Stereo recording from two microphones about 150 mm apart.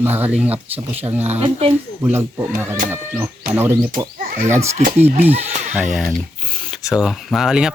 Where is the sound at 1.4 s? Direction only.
40° right (ahead or behind).